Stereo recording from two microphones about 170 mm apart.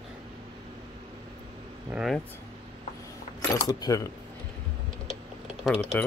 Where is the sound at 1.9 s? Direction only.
5° right (ahead or behind).